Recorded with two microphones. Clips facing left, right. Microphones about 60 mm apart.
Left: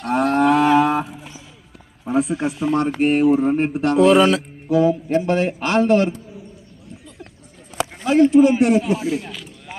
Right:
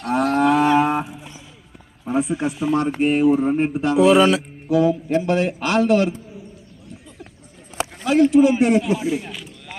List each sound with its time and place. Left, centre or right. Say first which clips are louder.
0.0 s livestock: left 1 dB; left
0.9 s a sound: left 1 dB; centre
2.3 s speech: even; centre
4.7 s speech: left 1 dB; left
8.0 s a sound: left 1 dB; left
8.5 s speech: left 1 dB; centre
8.9 s speech: even; centre